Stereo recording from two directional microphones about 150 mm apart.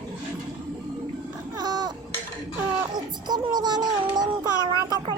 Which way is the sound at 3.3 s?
30° right (ahead or behind).